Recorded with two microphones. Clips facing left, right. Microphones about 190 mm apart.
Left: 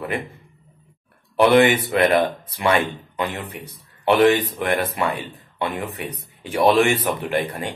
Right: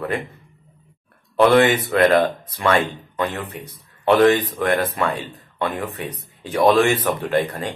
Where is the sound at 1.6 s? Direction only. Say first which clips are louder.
Even; 10° left (ahead or behind).